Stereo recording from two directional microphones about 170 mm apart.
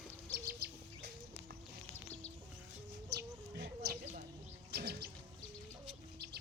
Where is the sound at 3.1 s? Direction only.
75° right (ahead or behind).